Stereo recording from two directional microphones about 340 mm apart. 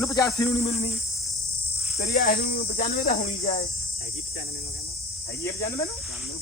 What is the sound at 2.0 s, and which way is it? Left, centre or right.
Cricket, left.